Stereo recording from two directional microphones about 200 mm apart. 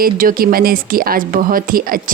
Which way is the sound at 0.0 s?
45° right (ahead or behind).